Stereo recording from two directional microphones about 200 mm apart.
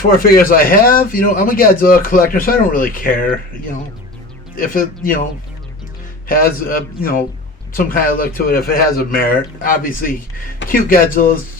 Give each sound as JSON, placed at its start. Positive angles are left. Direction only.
{"t": 0.2, "sound": "speech", "side_deg": 45}
{"t": 4.5, "sound": "speech", "side_deg": 45}
{"t": 6.2, "sound": "speech", "side_deg": 45}